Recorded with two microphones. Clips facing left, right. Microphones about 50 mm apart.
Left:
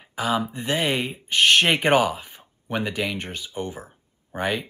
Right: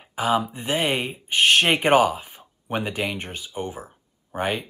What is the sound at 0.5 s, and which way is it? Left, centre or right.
Speech, right.